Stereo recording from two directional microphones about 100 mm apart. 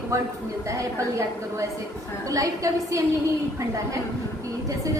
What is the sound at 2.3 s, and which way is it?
Speech, 35° right (ahead or behind).